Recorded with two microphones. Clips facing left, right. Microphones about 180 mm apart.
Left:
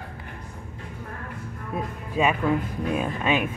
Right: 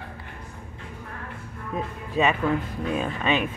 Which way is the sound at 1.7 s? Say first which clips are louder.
Right 1 dB; 10° left (ahead or behind).